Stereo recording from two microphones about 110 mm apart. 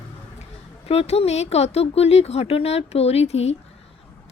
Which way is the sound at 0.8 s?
65° left (ahead or behind).